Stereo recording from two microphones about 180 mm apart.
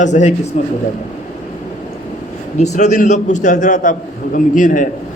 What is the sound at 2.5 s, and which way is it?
A man's voice, 40° left (ahead or behind).